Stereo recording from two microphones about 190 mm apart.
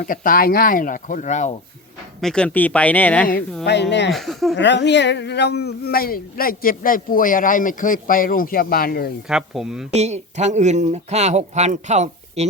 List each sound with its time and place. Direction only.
0.0 s speech: 45° left (ahead or behind)
2.2 s speech: 5° left (ahead or behind)
3.7 s speech: 65° left (ahead or behind)
4.1 s speech: centre (ahead or behind)
4.5 s speech: 70° left (ahead or behind); by 9.1 s 50° left (ahead or behind)
9.3 s speech: 5° right (ahead or behind)
9.9 s speech: 35° right (ahead or behind)